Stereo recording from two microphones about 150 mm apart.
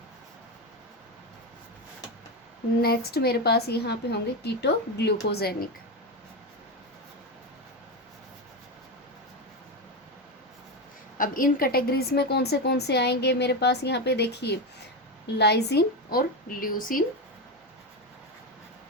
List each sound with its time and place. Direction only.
2.8 s a woman's voice: 90° left
11.2 s a woman's voice: 70° left (ahead or behind)